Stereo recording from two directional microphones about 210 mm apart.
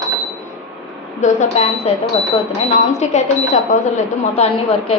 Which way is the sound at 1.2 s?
30° left (ahead or behind).